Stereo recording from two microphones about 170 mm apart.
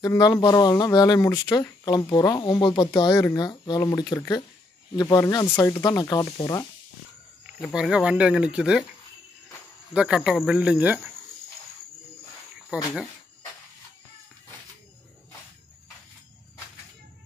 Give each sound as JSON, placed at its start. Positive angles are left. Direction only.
{"t": 0.0, "sound": "speech", "side_deg": 25}
{"t": 7.6, "sound": "speech", "side_deg": 0}
{"t": 9.9, "sound": "speech", "side_deg": -5}
{"t": 12.7, "sound": "speech", "side_deg": -10}